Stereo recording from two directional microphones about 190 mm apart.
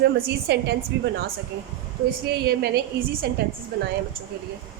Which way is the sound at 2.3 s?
55° right (ahead or behind).